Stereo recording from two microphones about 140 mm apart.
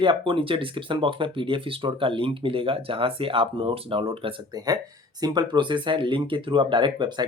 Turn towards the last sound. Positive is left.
turn(degrees=-35)  # may be behind; listen again after turning